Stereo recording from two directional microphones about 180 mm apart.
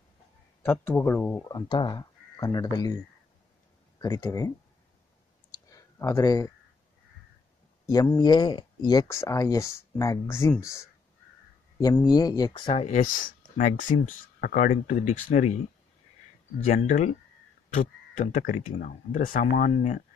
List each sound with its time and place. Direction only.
0.6 s speech: 10° left (ahead or behind)
1.5 s speech: 25° left (ahead or behind)
4.0 s speech: 20° left (ahead or behind)
5.7 s a sound: 15° left (ahead or behind)
7.8 s a sound: 20° left (ahead or behind)
8.2 s speech: 25° left (ahead or behind); by 15.6 s 45° left (ahead or behind)
16.7 s speech: 45° left (ahead or behind)